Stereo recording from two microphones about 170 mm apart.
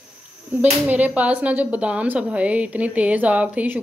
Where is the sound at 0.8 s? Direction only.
10° right (ahead or behind).